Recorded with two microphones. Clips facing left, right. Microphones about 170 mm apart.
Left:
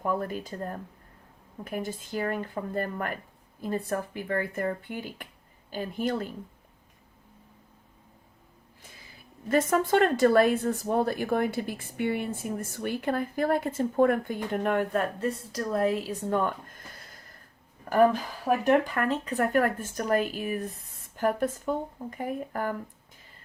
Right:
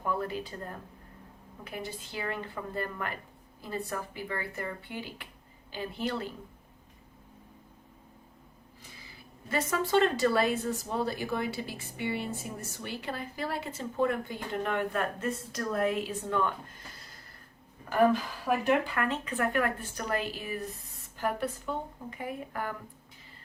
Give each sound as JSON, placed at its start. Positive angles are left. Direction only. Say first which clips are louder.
{"t": 0.1, "sound": "speech", "louder": "left 1 dB", "side_deg": 45}
{"t": 9.5, "sound": "speech", "louder": "left 5 dB", "side_deg": 50}
{"t": 18.6, "sound": "speech", "louder": "left 5 dB", "side_deg": 40}